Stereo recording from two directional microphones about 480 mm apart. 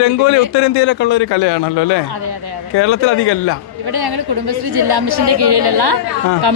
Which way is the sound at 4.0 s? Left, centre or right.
Right.